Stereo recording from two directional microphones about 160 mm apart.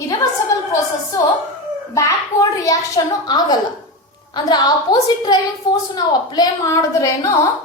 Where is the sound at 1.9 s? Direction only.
20° left (ahead or behind).